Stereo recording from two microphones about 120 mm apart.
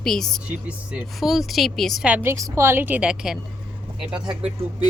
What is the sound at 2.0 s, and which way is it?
A woman's voice, 15° right (ahead or behind).